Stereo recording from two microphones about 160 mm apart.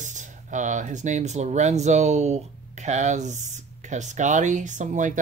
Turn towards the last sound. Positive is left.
turn(degrees=-50)  # may be behind; listen again after turning